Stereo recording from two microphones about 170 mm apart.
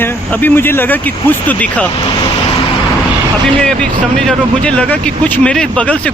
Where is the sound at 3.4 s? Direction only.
5° left (ahead or behind).